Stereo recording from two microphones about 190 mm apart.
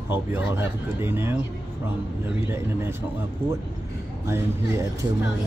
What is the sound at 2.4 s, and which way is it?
Speech, 15° right (ahead or behind).